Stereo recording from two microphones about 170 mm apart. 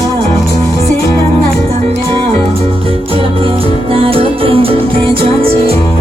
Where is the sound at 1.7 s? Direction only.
35° right (ahead or behind).